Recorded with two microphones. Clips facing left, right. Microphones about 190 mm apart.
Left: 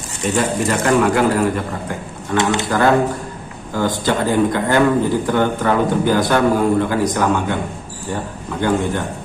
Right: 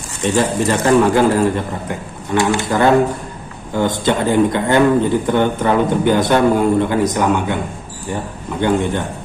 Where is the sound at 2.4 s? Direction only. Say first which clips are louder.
Right 1 dB; 20° left (ahead or behind).